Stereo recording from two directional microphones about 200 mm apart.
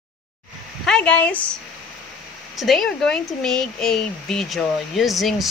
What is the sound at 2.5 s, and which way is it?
Speech, centre (ahead or behind).